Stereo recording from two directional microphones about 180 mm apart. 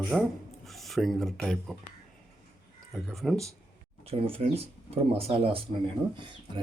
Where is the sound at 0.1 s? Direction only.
Centre (ahead or behind).